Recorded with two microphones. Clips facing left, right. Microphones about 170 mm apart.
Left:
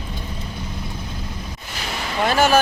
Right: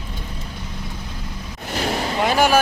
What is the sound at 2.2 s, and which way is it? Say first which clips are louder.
Speech: left 1 dB; 15° right (ahead or behind).